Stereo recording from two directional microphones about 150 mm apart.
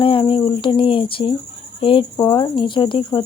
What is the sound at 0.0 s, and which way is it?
Speech, 35° left (ahead or behind).